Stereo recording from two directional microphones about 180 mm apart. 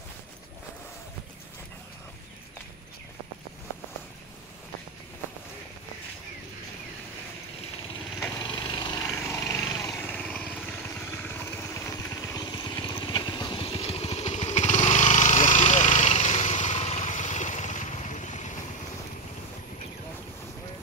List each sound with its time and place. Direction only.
8.4 s lawn mower: 25° left (ahead or behind); by 10.4 s 5° left (ahead or behind)
11.2 s vehicle: 15° left (ahead or behind); by 18.5 s 45° left (ahead or behind)